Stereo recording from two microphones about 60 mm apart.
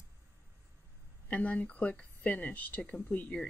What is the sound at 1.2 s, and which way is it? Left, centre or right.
Speech, left.